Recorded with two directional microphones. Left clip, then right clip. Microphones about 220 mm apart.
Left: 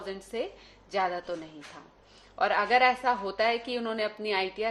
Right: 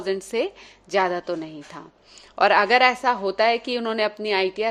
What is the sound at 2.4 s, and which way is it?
A woman's voice, 50° right (ahead or behind).